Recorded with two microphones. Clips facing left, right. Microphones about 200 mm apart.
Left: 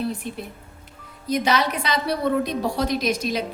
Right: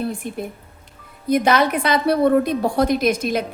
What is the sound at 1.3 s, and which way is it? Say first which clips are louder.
A woman's voice: right 5 dB; 55° right (ahead or behind).